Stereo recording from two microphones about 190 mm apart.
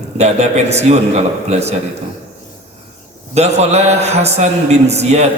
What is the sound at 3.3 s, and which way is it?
A man's voice, 35° right (ahead or behind).